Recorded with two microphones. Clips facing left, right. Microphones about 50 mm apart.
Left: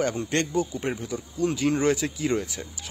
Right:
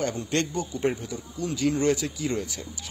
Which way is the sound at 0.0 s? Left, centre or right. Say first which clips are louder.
Left 2 dB; left.